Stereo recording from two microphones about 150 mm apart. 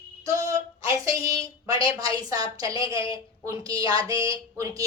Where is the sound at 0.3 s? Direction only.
20° right (ahead or behind).